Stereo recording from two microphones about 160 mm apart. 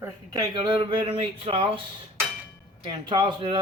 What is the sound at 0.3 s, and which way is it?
Speech, 30° right (ahead or behind).